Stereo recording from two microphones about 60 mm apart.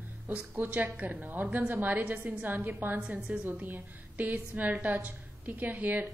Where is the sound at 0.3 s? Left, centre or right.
Right.